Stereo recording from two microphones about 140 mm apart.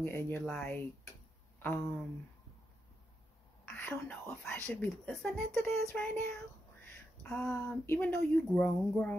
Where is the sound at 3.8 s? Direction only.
10° left (ahead or behind).